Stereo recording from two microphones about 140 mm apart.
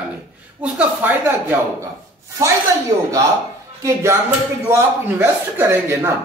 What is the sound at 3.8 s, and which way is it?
A man's voice, 20° right (ahead or behind).